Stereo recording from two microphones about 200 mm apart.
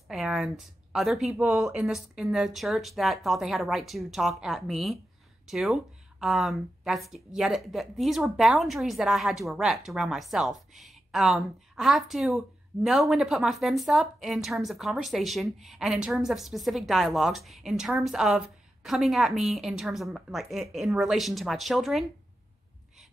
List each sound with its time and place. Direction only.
0.1 s speech: 5° right (ahead or behind)